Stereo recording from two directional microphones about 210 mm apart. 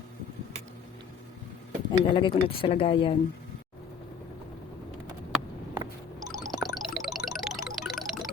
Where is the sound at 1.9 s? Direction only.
25° left (ahead or behind).